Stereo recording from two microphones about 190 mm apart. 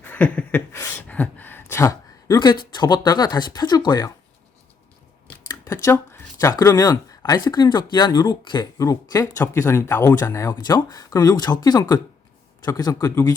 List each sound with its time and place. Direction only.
0.0 s speech: 10° left (ahead or behind)
5.5 s speech: 15° left (ahead or behind)